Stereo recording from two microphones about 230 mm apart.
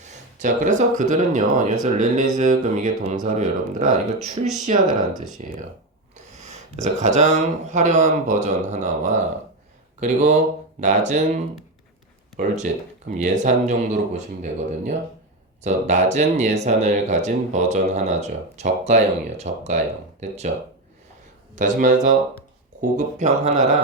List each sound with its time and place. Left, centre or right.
0.0 s speech: right
21.5 s speech: right